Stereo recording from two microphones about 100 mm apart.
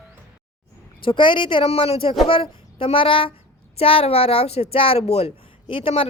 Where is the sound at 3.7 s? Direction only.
70° left (ahead or behind); by 5.3 s 90° left.